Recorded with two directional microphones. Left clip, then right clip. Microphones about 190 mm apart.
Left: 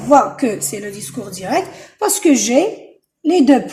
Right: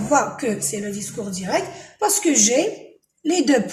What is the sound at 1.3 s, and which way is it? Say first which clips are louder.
Speech: left 5 dB; 55° left (ahead or behind).